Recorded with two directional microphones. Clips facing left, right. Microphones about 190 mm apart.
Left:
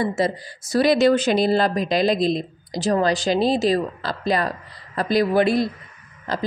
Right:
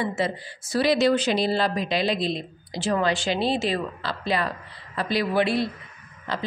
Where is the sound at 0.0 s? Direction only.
40° left (ahead or behind).